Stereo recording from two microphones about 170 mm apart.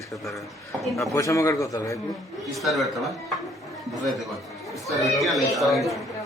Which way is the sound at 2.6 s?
Centre (ahead or behind).